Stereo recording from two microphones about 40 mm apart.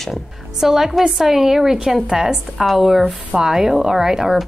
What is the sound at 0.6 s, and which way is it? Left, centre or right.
A woman's voice, centre.